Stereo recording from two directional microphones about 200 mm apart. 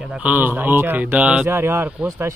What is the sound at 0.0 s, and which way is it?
Speech, 5° right (ahead or behind).